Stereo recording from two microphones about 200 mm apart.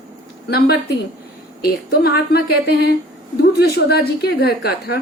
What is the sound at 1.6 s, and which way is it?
Speech, 50° left (ahead or behind).